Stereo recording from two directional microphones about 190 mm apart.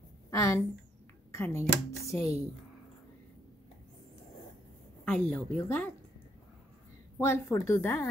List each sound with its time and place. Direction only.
0.3 s a woman's voice: 15° left (ahead or behind)
5.0 s speech: 5° left (ahead or behind)
7.2 s speech: 15° left (ahead or behind)